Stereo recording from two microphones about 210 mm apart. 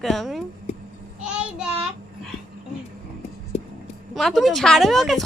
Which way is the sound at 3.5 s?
30° left (ahead or behind).